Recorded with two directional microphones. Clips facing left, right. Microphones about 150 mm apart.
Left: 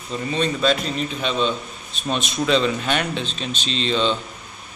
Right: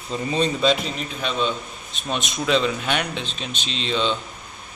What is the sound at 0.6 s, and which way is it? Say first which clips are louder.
Speech: even; 20° right (ahead or behind).